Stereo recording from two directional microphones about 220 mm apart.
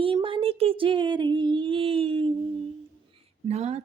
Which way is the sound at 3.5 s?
30° right (ahead or behind).